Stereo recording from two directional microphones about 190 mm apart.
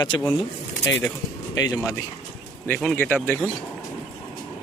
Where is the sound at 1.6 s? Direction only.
20° left (ahead or behind).